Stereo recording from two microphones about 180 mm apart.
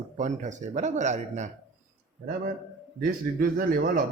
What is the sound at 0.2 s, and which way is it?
A man's voice, 40° right (ahead or behind).